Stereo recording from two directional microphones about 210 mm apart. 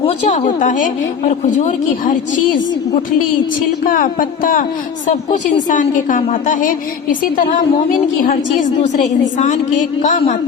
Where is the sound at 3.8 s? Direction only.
40° left (ahead or behind).